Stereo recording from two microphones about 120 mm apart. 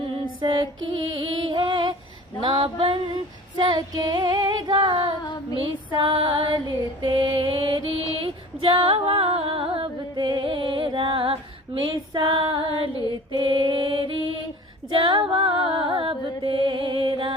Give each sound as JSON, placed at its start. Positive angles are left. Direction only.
{"t": 0.3, "sound": "female singing", "side_deg": -40}
{"t": 1.1, "sound": "music", "side_deg": -45}
{"t": 2.4, "sound": "female singing", "side_deg": -45}
{"t": 3.5, "sound": "female singing", "side_deg": -40}
{"t": 5.2, "sound": "female singing", "side_deg": 35}
{"t": 5.5, "sound": "female singing", "side_deg": -45}
{"t": 11.9, "sound": "music", "side_deg": -40}
{"t": 13.3, "sound": "mantra", "side_deg": -45}
{"t": 14.9, "sound": "music", "side_deg": -45}